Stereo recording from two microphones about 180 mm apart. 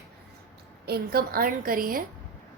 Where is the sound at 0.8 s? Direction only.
60° right (ahead or behind).